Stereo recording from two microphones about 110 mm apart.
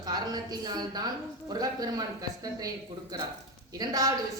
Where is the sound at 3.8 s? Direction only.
35° right (ahead or behind).